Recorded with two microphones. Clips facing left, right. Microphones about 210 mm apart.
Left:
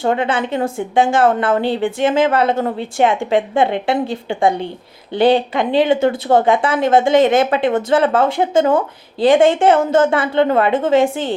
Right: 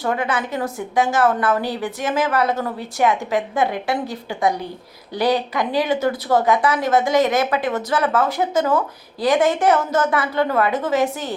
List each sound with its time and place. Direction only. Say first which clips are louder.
0.0 s a woman's voice: left 5 dB; 25° left (ahead or behind)